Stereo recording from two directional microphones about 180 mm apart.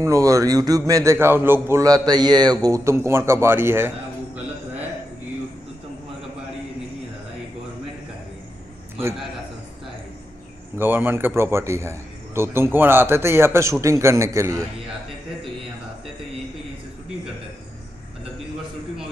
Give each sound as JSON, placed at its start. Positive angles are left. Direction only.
{"t": 0.0, "sound": "a man's voice", "side_deg": -15}
{"t": 10.8, "sound": "a man's voice", "side_deg": -10}